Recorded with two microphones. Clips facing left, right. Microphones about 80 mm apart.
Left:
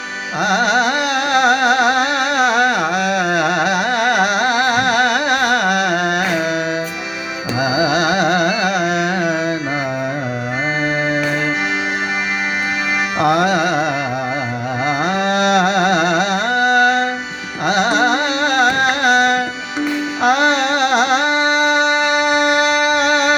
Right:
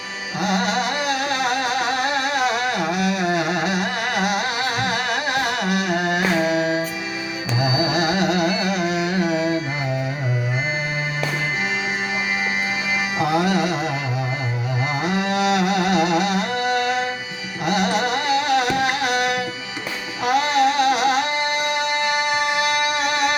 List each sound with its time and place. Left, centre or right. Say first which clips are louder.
0.3 s music: left 6 dB; left
7.6 s carnatic music: left 5 dB; left
13.1 s music: left 5 dB; left
14.8 s music: left 6 dB; left